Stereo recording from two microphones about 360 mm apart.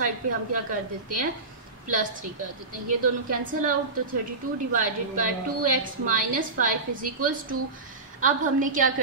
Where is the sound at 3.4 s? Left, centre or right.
Right.